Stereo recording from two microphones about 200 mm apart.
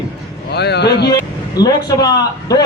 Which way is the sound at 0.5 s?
55° left (ahead or behind).